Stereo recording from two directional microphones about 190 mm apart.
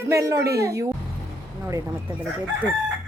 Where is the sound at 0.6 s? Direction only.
15° right (ahead or behind).